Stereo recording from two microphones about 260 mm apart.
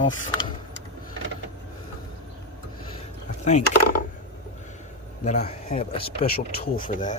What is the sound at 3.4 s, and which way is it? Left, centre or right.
Speech, left.